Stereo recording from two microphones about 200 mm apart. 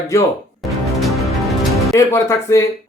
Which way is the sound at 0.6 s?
Centre (ahead or behind).